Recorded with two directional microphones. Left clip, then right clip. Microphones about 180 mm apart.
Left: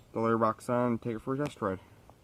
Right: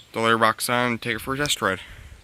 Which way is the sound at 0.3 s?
30° right (ahead or behind).